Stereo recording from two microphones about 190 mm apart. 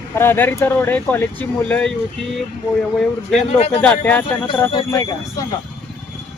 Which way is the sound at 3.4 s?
35° left (ahead or behind).